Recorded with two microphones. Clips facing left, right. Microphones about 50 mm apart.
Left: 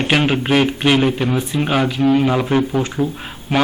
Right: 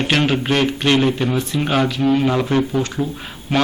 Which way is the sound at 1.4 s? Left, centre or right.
Centre.